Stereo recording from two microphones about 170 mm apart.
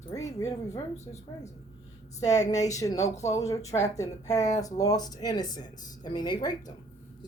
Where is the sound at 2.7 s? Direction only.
20° left (ahead or behind).